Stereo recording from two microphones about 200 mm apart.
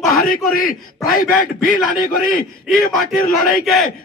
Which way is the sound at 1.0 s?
45° left (ahead or behind).